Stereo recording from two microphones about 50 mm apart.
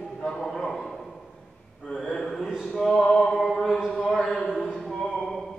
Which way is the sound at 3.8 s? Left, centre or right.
Centre.